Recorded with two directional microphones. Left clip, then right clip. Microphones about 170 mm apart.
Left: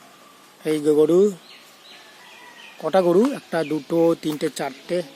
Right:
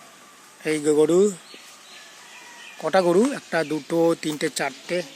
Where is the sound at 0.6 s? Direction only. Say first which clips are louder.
Left 2 dB; 10° left (ahead or behind).